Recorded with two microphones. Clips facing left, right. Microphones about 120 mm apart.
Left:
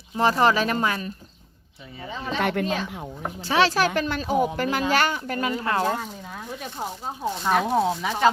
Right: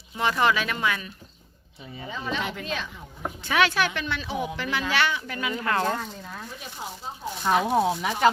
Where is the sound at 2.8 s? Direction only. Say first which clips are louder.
Left 8 dB; 75° left (ahead or behind).